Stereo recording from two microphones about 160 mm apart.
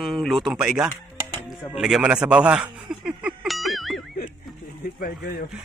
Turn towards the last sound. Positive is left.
turn(degrees=70)  # may be behind; listen again after turning